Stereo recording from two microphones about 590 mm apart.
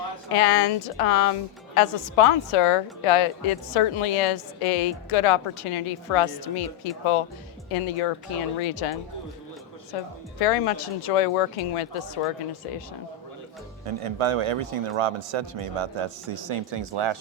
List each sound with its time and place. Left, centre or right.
0.3 s a woman's voice: left
10.4 s a woman's voice: left
13.8 s a man's voice: right